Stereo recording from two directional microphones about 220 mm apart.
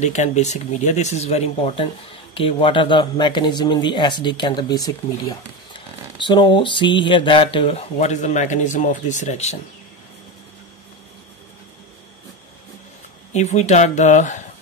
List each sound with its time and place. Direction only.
0.0 s speech: 30° left (ahead or behind)
13.3 s speech: 30° left (ahead or behind)